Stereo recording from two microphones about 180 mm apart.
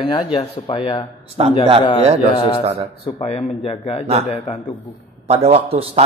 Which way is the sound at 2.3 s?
30° left (ahead or behind).